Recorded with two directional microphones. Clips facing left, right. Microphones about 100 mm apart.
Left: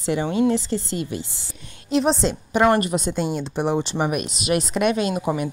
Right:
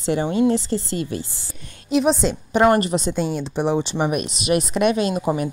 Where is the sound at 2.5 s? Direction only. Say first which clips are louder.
Right 2 dB; 30° right (ahead or behind).